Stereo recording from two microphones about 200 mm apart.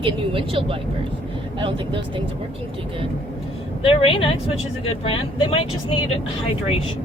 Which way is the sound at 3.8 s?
25° left (ahead or behind).